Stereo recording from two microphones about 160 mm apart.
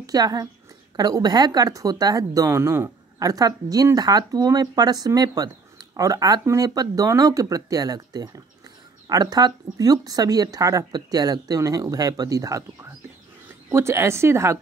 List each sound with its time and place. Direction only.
0.0 s a woman's voice: 25° right (ahead or behind)